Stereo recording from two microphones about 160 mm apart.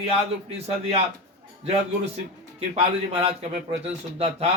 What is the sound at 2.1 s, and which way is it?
A man's voice, 40° right (ahead or behind).